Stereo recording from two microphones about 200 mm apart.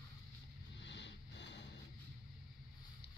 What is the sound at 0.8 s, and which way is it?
Vehicle, 60° left (ahead or behind).